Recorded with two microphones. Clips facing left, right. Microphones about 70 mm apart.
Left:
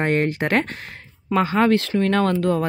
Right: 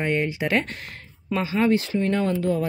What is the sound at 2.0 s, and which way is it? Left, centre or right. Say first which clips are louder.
Speech: left 4 dB; left.